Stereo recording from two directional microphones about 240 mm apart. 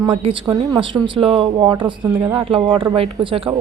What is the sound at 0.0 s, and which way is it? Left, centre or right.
A woman's voice, centre.